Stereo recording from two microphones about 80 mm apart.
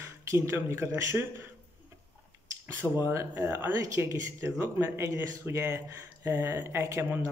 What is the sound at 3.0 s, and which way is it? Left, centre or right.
A man's voice, right.